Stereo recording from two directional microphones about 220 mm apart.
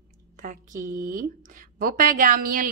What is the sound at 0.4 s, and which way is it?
A woman's voice, 35° right (ahead or behind).